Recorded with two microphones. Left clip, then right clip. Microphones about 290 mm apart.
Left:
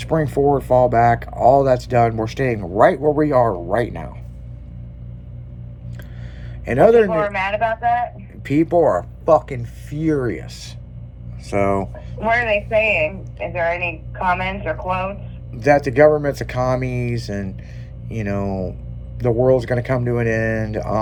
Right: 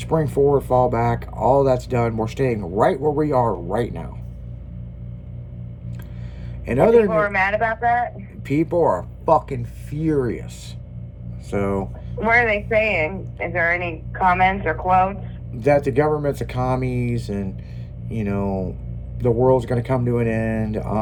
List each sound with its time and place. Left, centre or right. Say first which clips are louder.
0.0 s speech: left 1 dB; centre
6.7 s speech: left 2 dB; centre
7.3 s speech: even; centre
8.4 s speech: left 3 dB; centre
12.1 s speech: even; centre
15.5 s speech: left 3 dB; centre
18.4 s speech: left 1 dB; left
19.2 s speech: left 1 dB; centre